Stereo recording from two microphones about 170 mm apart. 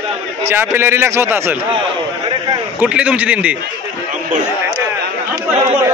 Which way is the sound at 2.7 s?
5° right (ahead or behind).